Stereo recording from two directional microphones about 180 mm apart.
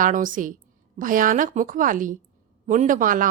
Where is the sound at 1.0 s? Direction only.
50° right (ahead or behind).